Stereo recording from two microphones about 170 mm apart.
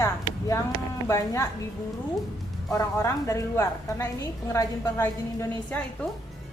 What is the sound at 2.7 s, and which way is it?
A woman's voice, 15° left (ahead or behind).